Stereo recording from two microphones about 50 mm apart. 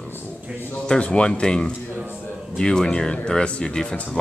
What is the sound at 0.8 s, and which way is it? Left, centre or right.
Speech, left.